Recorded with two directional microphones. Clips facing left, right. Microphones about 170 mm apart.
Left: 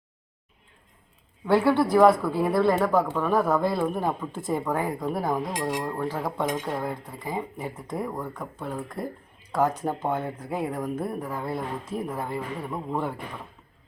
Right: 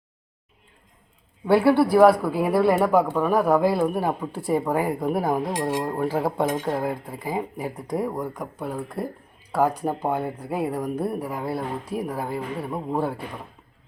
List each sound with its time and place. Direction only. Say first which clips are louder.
1.5 s speech: right 3 dB; 10° right (ahead or behind)
5.3 s cutlery: right 3 dB; 25° right (ahead or behind)
6.8 s speech: right 4 dB; 5° right (ahead or behind)